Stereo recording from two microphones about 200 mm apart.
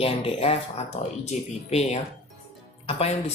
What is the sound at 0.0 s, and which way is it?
Speech, 30° left (ahead or behind).